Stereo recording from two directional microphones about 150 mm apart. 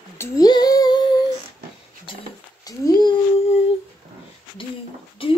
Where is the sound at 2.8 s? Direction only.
25° left (ahead or behind).